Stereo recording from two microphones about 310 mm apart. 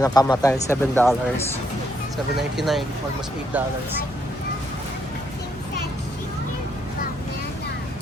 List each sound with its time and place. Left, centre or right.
0.0 s speech: centre
2.3 s speech: centre